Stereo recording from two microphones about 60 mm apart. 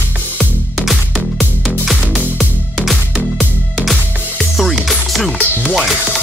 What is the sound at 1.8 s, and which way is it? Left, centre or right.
Music, centre.